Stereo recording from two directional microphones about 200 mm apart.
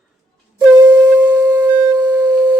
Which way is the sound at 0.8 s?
20° right (ahead or behind).